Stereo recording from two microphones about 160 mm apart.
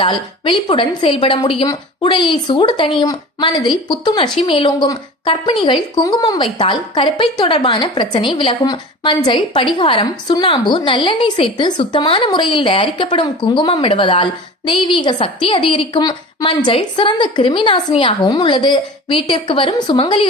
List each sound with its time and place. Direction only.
0.0 s a woman's voice: 30° left (ahead or behind)